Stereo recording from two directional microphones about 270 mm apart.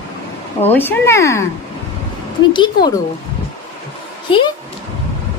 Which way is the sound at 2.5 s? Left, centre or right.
Centre.